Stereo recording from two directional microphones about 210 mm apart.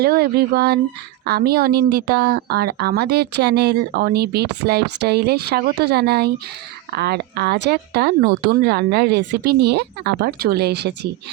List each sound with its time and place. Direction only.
0.0 s speech: 50° right (ahead or behind)